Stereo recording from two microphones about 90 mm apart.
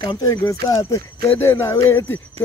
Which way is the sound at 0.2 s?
40° left (ahead or behind).